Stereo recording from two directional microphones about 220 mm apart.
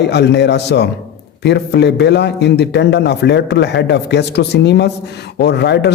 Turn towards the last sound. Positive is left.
turn(degrees=50)  # may be behind; listen again after turning